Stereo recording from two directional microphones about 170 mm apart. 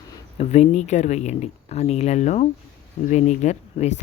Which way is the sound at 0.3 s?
40° left (ahead or behind).